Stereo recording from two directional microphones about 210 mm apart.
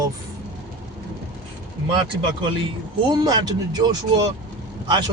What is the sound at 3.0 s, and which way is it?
Speech, 20° right (ahead or behind).